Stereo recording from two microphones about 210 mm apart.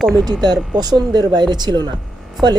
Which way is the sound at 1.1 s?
20° right (ahead or behind).